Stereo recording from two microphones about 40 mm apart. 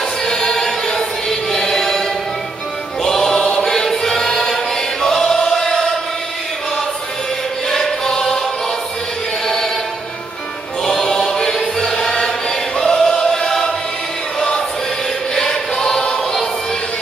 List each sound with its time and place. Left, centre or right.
0.2 s choir: centre
7.7 s choir: centre
10.8 s choir: centre
15.3 s choir: centre